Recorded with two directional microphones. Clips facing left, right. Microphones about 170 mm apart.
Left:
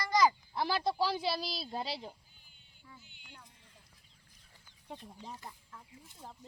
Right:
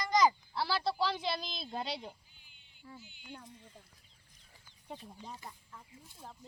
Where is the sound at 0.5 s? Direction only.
15° left (ahead or behind).